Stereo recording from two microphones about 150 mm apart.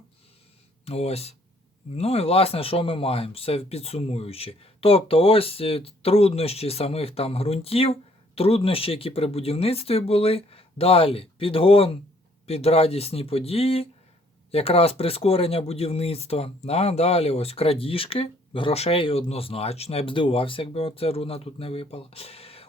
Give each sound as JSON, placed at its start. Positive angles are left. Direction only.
{"t": 0.9, "sound": "speech", "side_deg": 45}